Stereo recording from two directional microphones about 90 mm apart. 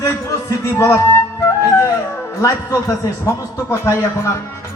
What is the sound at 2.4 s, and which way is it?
A man's voice, 40° left (ahead or behind).